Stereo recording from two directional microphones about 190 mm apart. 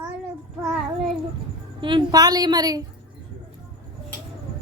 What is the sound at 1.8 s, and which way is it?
A woman's voice, 25° right (ahead or behind).